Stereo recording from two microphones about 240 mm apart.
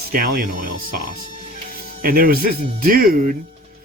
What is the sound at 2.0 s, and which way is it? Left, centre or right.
Speech, right.